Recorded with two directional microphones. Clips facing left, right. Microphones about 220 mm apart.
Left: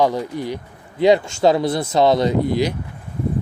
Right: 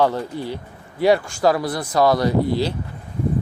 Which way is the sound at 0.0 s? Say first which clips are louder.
Left 1 dB; 15° left (ahead or behind).